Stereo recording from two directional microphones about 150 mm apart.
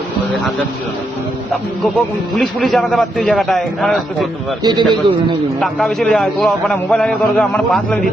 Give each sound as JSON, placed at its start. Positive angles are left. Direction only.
{"t": 2.3, "sound": "a man's voice", "side_deg": 0}
{"t": 4.6, "sound": "a man's voice", "side_deg": -30}
{"t": 5.5, "sound": "a man's voice", "side_deg": 0}